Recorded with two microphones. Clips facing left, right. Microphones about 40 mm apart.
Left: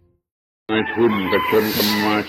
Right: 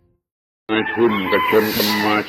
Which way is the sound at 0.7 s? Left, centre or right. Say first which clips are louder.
Right 1 dB; centre.